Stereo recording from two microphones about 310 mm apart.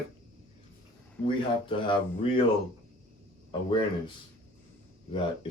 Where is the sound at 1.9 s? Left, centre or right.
Centre.